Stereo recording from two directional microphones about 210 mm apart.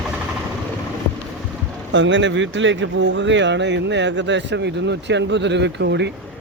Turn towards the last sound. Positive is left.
turn(degrees=-55)  # may be behind; listen again after turning